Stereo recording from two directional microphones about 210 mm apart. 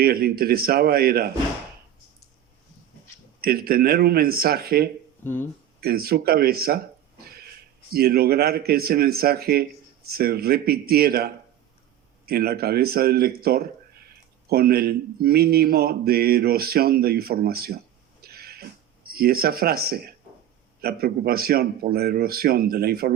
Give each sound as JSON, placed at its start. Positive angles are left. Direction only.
{"t": 0.0, "sound": "speech", "side_deg": -45}
{"t": 3.4, "sound": "speech", "side_deg": -45}
{"t": 7.3, "sound": "a sound", "side_deg": -45}
{"t": 7.9, "sound": "a man's voice", "side_deg": -45}
{"t": 18.2, "sound": "a sound", "side_deg": -50}
{"t": 20.8, "sound": "speech", "side_deg": -45}